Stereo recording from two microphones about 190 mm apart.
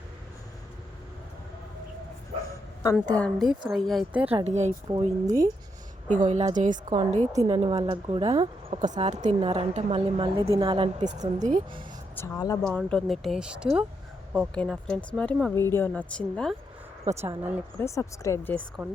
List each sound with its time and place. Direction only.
3.2 s speech: 5° left (ahead or behind)
4.3 s speech: 35° right (ahead or behind)
5.2 s a woman's voice: 20° right (ahead or behind)
6.1 s a woman's voice: 40° right (ahead or behind); by 10.8 s 25° right (ahead or behind)
11.0 s speech: 40° right (ahead or behind)
12.1 s speech: 15° left (ahead or behind)
12.6 s speech: 5° left (ahead or behind)
17.2 s speech: 10° right (ahead or behind)
17.7 s speech: 15° left (ahead or behind)